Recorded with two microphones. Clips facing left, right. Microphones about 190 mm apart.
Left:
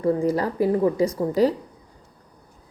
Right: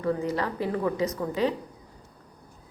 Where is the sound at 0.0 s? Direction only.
30° left (ahead or behind).